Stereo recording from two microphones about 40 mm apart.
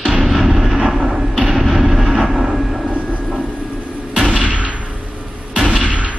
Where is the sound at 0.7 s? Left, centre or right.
Centre.